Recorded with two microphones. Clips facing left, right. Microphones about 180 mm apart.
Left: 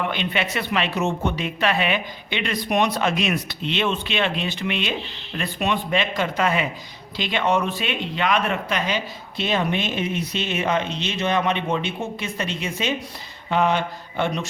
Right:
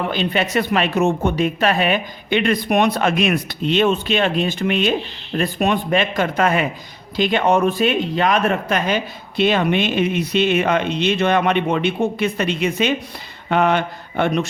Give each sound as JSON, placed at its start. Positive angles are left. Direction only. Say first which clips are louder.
{"t": 0.0, "sound": "speech", "louder": "right 4 dB", "side_deg": -35}